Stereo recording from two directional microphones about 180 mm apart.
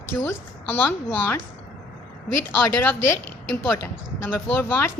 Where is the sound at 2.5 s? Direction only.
10° left (ahead or behind).